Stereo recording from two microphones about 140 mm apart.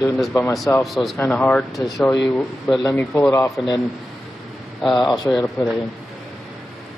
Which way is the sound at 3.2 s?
20° left (ahead or behind).